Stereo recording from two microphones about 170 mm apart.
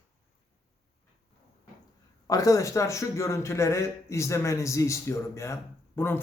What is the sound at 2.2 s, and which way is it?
A man's voice, 20° left (ahead or behind).